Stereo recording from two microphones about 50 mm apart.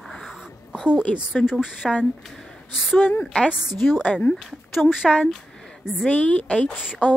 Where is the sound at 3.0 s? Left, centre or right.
Left.